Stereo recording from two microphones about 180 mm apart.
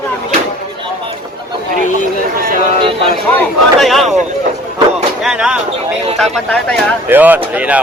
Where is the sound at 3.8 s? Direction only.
Centre (ahead or behind).